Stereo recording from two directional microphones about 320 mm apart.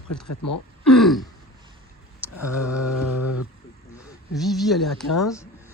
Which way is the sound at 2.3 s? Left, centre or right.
Left.